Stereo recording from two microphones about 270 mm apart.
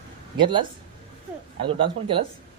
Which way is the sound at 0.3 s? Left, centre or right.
Centre.